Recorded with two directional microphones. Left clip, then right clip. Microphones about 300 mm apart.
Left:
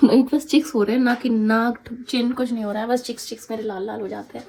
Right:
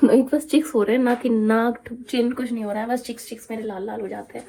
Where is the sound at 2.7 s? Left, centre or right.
Centre.